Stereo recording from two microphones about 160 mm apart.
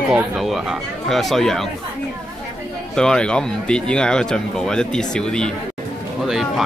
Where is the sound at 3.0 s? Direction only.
5° left (ahead or behind).